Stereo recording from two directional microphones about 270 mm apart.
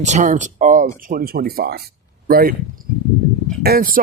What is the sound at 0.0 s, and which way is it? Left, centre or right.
Speech, right.